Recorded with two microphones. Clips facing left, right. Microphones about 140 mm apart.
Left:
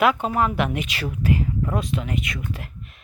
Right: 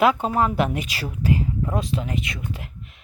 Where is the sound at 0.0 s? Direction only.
30° right (ahead or behind).